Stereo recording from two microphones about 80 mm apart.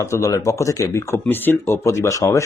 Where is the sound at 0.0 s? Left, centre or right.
Left.